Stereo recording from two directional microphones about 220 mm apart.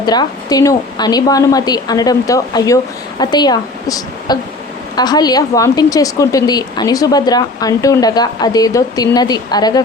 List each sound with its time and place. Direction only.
0.0 s a woman's voice: 20° left (ahead or behind)